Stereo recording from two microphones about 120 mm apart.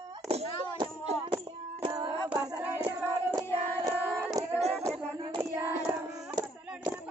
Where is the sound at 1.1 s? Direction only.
65° right (ahead or behind).